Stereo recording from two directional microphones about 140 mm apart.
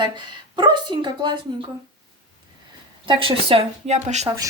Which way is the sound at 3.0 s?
40° right (ahead or behind).